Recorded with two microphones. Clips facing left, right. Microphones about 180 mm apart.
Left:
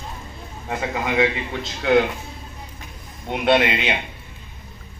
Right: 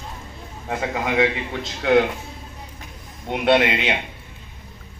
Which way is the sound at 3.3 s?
60° right (ahead or behind).